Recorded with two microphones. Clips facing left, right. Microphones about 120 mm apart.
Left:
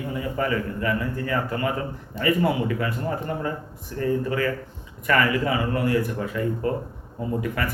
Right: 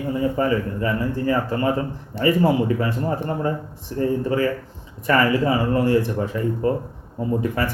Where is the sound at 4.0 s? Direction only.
30° right (ahead or behind).